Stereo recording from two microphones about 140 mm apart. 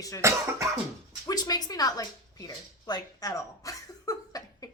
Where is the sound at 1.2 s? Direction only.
30° left (ahead or behind).